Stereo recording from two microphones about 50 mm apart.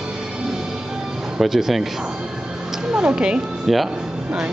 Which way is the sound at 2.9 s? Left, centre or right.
Centre.